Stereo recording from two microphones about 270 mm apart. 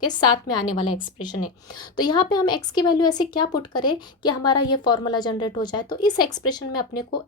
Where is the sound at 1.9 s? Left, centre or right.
Centre.